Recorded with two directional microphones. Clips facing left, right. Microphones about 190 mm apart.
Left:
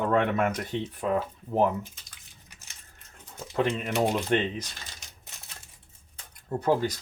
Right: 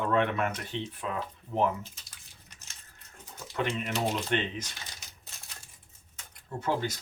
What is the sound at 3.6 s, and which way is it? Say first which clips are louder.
Speech: left 5 dB; 35° left (ahead or behind).